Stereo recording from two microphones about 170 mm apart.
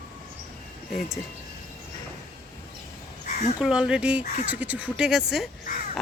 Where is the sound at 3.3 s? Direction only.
45° left (ahead or behind).